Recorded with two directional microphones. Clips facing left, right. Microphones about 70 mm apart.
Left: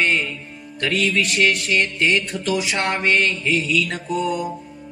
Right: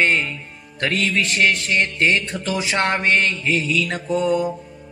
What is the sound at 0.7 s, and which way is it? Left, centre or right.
Music, right.